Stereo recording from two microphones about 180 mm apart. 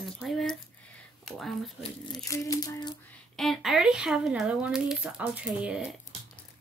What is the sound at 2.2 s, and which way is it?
Speech, 20° left (ahead or behind).